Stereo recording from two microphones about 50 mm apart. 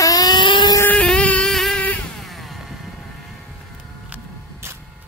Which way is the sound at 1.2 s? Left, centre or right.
Left.